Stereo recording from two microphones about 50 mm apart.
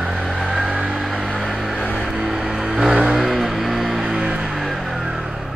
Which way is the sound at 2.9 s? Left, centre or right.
Right.